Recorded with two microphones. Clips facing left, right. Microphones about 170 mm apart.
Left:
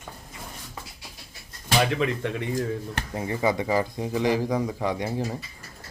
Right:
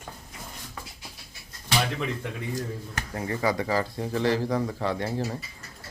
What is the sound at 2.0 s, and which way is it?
Speech, 75° left (ahead or behind).